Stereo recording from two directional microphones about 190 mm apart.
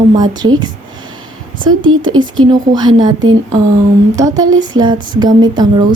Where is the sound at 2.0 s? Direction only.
25° right (ahead or behind).